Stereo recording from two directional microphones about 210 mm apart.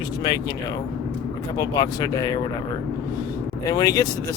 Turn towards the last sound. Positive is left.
turn(degrees=15)  # may be behind; listen again after turning